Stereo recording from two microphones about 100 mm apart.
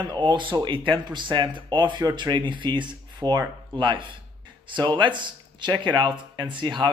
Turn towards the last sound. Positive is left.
turn(degrees=-55)  # may be behind; listen again after turning